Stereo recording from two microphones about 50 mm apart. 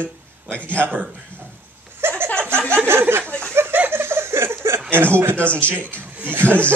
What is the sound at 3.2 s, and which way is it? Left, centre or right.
Chuckle, left.